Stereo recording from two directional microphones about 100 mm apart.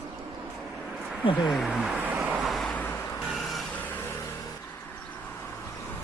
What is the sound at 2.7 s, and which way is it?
Vehicle, 20° left (ahead or behind).